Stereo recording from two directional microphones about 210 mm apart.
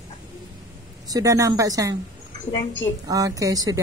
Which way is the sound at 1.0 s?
15° right (ahead or behind).